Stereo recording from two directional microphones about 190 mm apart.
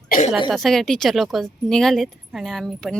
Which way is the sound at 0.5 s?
Centre (ahead or behind).